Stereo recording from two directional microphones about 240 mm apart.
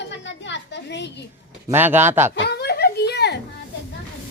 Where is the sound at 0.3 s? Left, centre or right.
Left.